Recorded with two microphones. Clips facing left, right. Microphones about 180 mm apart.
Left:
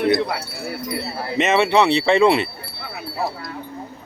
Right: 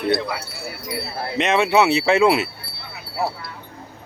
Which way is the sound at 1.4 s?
Centre (ahead or behind).